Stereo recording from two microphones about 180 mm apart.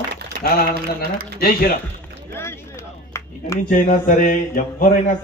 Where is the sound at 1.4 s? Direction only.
55° left (ahead or behind).